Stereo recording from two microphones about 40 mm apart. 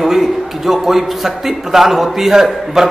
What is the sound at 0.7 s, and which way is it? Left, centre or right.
A man's voice, centre.